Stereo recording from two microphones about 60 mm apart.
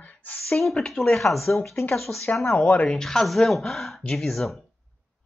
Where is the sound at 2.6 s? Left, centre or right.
Left.